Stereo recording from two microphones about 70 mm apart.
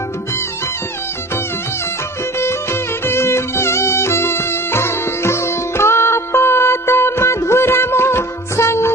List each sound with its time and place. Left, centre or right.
3.1 s music: left